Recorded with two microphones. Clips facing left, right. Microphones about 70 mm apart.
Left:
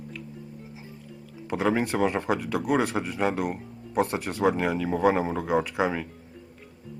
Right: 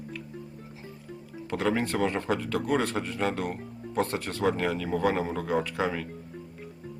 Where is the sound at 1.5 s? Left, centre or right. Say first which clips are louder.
Left 2 dB; centre.